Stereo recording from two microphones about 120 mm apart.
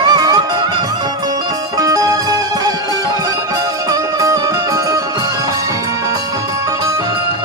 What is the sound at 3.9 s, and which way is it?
Music, 30° right (ahead or behind).